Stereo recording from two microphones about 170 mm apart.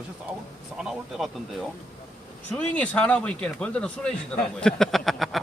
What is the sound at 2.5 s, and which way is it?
Speech, 5° left (ahead or behind).